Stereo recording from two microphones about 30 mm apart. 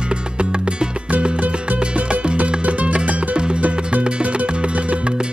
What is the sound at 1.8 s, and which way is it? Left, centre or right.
Music, right.